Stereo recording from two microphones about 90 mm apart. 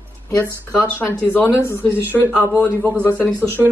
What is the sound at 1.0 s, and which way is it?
Speech, 20° left (ahead or behind).